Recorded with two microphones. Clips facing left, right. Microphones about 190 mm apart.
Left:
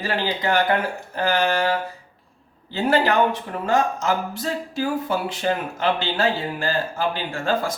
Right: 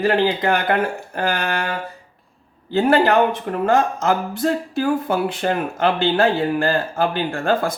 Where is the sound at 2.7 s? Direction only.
55° right (ahead or behind).